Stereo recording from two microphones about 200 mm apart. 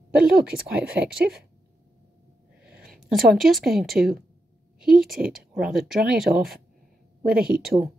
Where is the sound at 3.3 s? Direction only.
Centre (ahead or behind).